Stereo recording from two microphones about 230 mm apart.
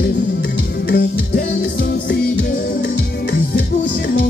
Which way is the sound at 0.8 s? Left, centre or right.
Left.